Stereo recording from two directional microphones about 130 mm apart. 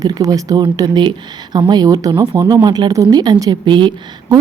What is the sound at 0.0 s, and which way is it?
Speech, 25° right (ahead or behind).